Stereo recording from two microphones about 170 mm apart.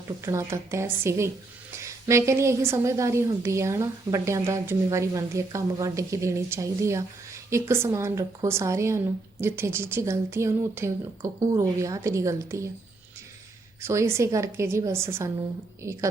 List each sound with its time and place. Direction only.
0.2 s a woman's voice: 15° right (ahead or behind)
13.8 s a woman's voice: 15° right (ahead or behind)